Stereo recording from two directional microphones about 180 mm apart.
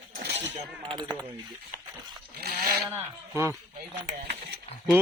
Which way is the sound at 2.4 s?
60° right (ahead or behind).